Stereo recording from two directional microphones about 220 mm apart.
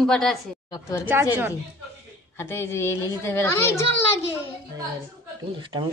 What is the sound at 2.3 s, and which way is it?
A woman's voice, 10° left (ahead or behind).